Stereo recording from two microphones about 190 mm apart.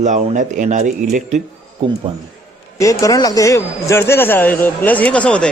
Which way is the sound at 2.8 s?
15° left (ahead or behind).